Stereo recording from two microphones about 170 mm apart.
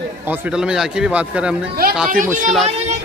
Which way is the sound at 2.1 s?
50° right (ahead or behind).